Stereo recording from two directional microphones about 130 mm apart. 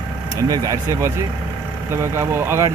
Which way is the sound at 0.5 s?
25° right (ahead or behind).